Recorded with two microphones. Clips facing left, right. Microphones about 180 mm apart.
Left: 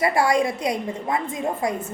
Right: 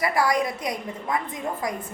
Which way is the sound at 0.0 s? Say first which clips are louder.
Left 3 dB; 25° left (ahead or behind).